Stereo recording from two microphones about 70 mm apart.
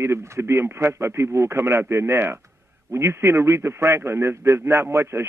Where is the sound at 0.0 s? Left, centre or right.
Right.